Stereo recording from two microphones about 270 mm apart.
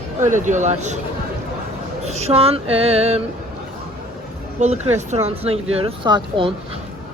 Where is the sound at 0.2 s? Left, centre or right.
Right.